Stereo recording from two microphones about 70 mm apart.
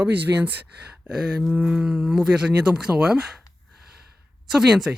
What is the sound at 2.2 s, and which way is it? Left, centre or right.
Speech, centre.